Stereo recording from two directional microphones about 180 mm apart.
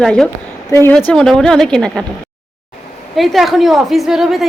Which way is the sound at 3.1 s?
Centre (ahead or behind).